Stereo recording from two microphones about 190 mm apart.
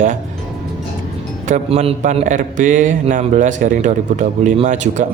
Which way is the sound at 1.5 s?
30° right (ahead or behind).